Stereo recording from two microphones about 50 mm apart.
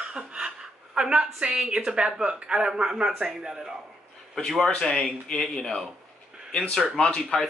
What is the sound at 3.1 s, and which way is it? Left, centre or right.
Speech, centre.